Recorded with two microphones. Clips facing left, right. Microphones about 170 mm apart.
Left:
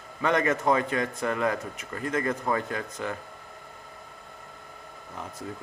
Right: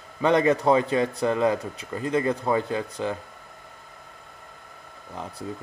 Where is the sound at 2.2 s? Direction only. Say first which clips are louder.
Right 4 dB; 15° right (ahead or behind).